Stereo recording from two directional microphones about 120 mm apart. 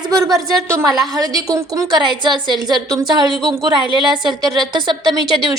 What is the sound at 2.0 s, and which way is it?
A woman's voice, 40° right (ahead or behind).